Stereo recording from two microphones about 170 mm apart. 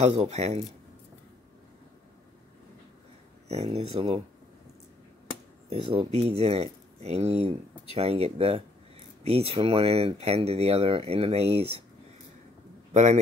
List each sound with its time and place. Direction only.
0.2 s speech: 40° right (ahead or behind)
3.4 s speech: 40° right (ahead or behind)
5.7 s speech: 35° right (ahead or behind)
12.9 s a man's voice: 40° right (ahead or behind)